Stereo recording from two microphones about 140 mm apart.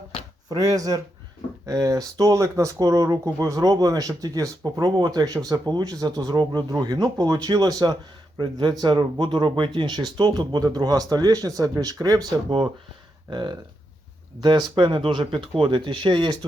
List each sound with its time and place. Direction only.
0.4 s speech: 25° right (ahead or behind)
13.3 s speech: 30° right (ahead or behind)